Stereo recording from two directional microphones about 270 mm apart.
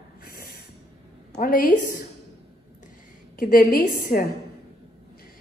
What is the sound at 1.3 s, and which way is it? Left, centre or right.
Speech, left.